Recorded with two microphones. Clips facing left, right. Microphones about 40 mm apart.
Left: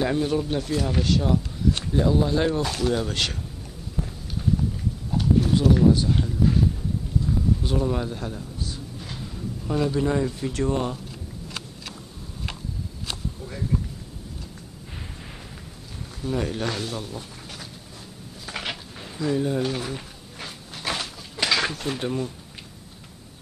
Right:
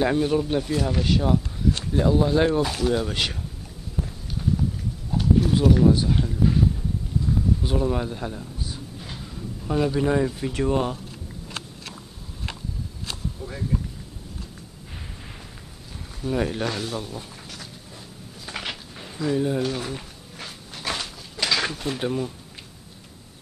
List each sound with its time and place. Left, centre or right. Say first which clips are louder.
0.0 s speech: right 2 dB; centre
1.0 s speech: right 1 dB; centre
4.0 s a sound: even; centre
5.1 s speech: right 1 dB; centre
7.2 s a sound: right 1 dB; centre
9.8 s speech: right 2 dB; centre
13.5 s thunder: even; centre
16.2 s speech: right 2 dB; centre
18.5 s a sound: left 1 dB; centre